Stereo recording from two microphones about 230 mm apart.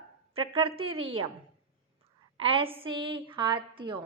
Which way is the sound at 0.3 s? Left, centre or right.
Right.